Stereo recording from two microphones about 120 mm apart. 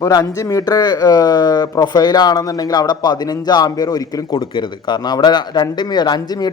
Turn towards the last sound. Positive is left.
turn(degrees=35)  # may be behind; listen again after turning